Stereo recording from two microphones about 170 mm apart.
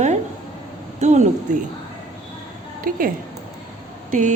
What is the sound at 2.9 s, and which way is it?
Speech, 55° right (ahead or behind).